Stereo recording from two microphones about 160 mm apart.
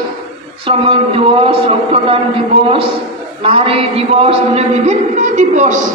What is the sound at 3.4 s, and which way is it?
A man's voice, 35° right (ahead or behind).